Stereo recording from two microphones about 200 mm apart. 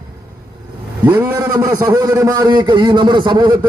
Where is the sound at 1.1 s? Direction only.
20° right (ahead or behind).